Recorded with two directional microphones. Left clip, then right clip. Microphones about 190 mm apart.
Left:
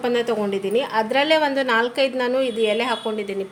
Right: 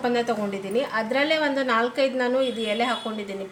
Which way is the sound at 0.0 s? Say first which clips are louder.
Left 3 dB; 45° left (ahead or behind).